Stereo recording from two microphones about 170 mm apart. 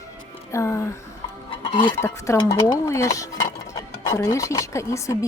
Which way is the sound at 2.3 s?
20° left (ahead or behind).